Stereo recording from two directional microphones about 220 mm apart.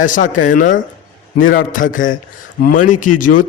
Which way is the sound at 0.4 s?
35° left (ahead or behind).